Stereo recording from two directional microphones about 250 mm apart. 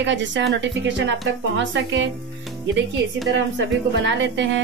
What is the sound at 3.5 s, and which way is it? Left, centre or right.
Speech, right.